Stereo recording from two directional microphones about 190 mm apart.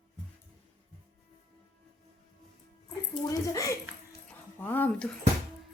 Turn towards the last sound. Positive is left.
turn(degrees=10)  # may be behind; listen again after turning